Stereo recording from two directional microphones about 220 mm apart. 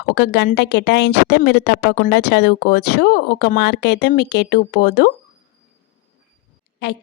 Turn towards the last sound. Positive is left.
turn(degrees=50)  # may be behind; listen again after turning